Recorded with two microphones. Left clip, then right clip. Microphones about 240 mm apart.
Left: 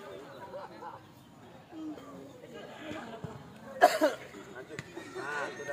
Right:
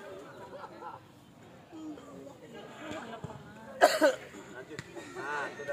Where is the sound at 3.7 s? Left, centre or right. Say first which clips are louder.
Right 1 dB; right.